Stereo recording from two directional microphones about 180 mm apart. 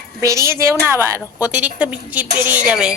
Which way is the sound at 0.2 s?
15° right (ahead or behind).